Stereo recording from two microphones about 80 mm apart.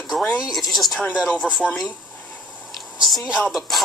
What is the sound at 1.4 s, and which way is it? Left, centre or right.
Speech, centre.